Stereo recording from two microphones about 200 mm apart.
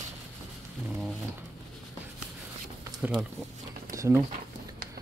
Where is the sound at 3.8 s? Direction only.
15° right (ahead or behind).